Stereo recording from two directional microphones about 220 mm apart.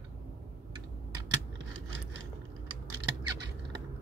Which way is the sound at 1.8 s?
60° right (ahead or behind).